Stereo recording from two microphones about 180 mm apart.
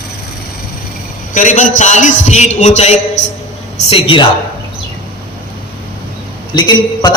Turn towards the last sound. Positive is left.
turn(degrees=25)  # may be behind; listen again after turning